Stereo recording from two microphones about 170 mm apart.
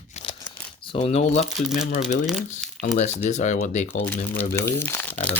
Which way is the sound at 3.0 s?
45° left (ahead or behind).